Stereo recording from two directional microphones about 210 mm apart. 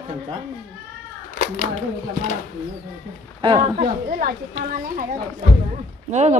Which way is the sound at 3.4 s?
25° right (ahead or behind).